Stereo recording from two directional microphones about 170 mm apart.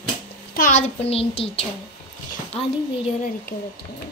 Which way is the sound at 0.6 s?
45° left (ahead or behind).